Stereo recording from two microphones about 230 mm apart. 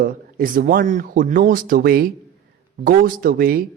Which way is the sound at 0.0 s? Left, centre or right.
Right.